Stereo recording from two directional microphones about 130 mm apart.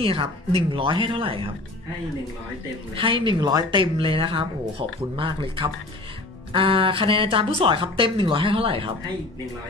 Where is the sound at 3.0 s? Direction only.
40° right (ahead or behind).